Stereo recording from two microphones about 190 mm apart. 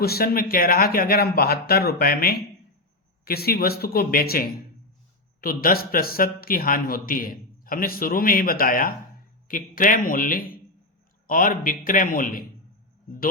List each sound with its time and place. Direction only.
0.0 s speech: 55° left (ahead or behind)